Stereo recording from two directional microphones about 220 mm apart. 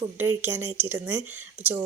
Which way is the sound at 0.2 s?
10° right (ahead or behind).